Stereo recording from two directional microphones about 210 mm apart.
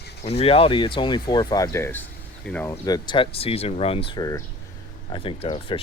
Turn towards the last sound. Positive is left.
turn(degrees=25)  # may be behind; listen again after turning